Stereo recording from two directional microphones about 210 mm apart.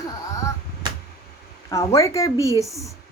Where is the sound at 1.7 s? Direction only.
15° left (ahead or behind).